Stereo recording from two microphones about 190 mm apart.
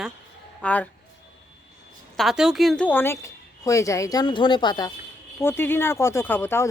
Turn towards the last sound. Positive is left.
turn(degrees=10)  # may be behind; listen again after turning